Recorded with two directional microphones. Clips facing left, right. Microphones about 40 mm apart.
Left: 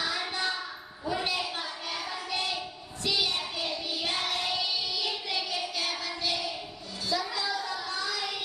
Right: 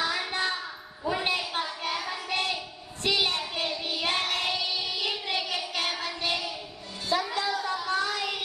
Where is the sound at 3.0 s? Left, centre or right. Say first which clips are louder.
Right 3 dB; right.